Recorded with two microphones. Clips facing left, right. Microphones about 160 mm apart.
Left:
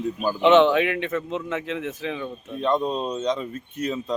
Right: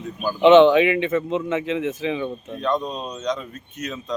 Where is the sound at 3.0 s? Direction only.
25° left (ahead or behind).